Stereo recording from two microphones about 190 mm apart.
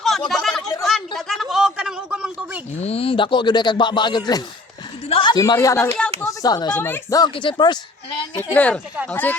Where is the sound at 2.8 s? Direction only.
30° left (ahead or behind).